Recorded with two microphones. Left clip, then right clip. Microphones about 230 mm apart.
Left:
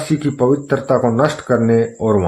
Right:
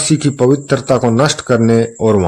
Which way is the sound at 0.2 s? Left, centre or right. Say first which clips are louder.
Right 3 dB; right.